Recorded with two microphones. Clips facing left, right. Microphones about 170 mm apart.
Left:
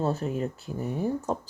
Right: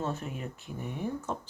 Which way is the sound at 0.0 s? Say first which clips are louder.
Left 7 dB; 35° left (ahead or behind).